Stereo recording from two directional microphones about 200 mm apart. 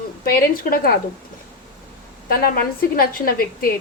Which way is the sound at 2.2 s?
50° left (ahead or behind).